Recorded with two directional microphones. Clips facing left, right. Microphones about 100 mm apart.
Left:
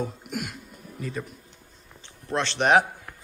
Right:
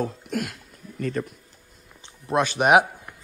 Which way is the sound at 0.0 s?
Centre (ahead or behind).